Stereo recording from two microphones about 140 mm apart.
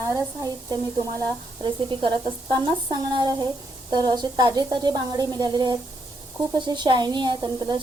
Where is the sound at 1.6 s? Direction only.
35° right (ahead or behind).